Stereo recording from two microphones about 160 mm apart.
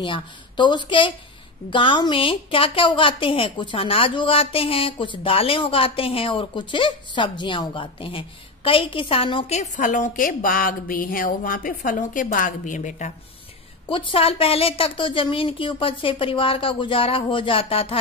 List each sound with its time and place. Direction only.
0.0 s a woman's voice: 30° left (ahead or behind); by 13.1 s 50° left (ahead or behind)
13.8 s a woman's voice: 30° left (ahead or behind)